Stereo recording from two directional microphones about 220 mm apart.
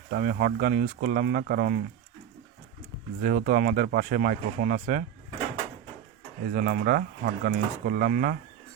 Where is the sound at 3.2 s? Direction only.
35° right (ahead or behind).